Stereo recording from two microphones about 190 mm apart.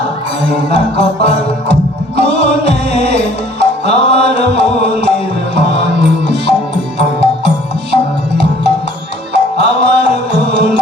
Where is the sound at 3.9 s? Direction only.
60° right (ahead or behind).